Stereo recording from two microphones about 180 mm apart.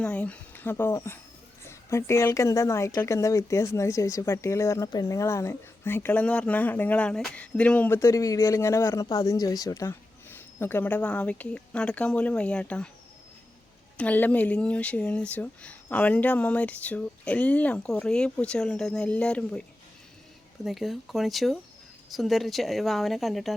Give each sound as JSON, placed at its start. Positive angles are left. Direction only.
{"t": 0.0, "sound": "a woman's voice", "side_deg": 5}
{"t": 13.9, "sound": "a woman's voice", "side_deg": 10}
{"t": 20.7, "sound": "speech", "side_deg": 0}